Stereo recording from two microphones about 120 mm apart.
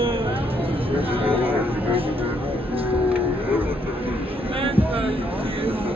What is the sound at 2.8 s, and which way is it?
Music, 50° right (ahead or behind).